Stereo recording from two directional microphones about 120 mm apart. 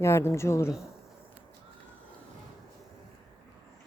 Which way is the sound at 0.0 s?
25° left (ahead or behind).